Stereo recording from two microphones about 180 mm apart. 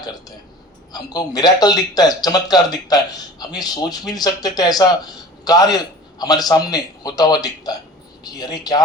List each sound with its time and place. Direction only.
0.0 s speech: 20° left (ahead or behind)